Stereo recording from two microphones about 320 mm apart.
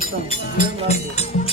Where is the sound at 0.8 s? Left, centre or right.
Centre.